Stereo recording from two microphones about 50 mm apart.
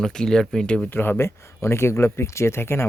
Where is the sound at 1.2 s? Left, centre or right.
Left.